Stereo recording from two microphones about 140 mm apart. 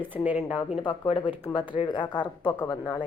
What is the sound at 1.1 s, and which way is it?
Speech, 40° left (ahead or behind).